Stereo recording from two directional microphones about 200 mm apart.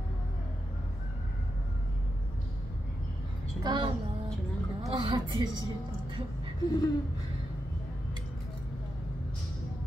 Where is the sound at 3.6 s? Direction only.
20° right (ahead or behind).